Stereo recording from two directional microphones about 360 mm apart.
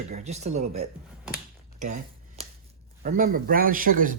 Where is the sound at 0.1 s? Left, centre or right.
Centre.